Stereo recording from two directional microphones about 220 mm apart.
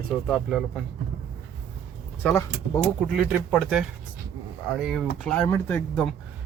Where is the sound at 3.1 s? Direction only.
5° right (ahead or behind).